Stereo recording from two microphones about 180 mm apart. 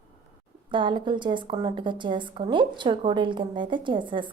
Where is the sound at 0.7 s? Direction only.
25° right (ahead or behind).